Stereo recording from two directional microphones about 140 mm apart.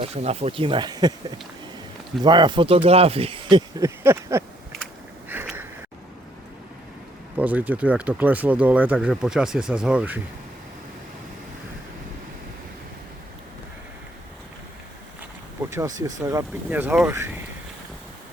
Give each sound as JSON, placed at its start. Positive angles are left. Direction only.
{"t": 0.0, "sound": "speech", "side_deg": -50}
{"t": 2.2, "sound": "speech", "side_deg": -30}
{"t": 3.8, "sound": "a sound", "side_deg": -20}
{"t": 7.3, "sound": "speech", "side_deg": -10}
{"t": 15.7, "sound": "a sound", "side_deg": -20}
{"t": 16.6, "sound": "speech", "side_deg": -10}